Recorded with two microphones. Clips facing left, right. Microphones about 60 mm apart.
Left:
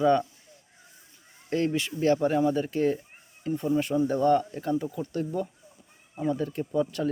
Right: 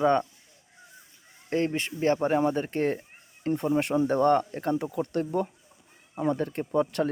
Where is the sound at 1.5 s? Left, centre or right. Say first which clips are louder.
Even; right.